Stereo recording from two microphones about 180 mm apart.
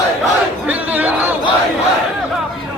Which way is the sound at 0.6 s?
10° right (ahead or behind).